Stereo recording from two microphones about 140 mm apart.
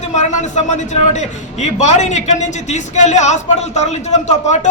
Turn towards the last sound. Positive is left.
turn(degrees=55)  # may be behind; listen again after turning